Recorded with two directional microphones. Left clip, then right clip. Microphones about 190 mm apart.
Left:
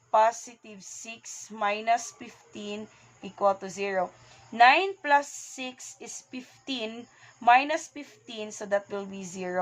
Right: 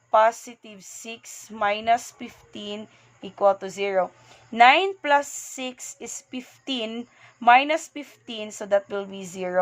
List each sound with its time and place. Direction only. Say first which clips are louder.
0.1 s speech: right 4 dB; 40° right (ahead or behind)